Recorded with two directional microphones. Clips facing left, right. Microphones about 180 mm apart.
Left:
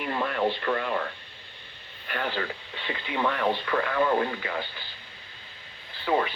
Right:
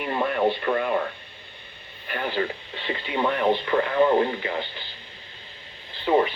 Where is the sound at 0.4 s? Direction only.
15° right (ahead or behind).